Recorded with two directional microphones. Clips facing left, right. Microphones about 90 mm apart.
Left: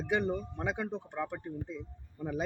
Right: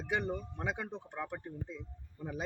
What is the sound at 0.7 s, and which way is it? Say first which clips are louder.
Speech: left 5 dB; 75° left (ahead or behind).